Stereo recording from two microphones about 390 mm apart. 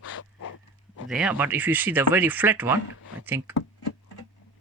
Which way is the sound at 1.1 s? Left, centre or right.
Centre.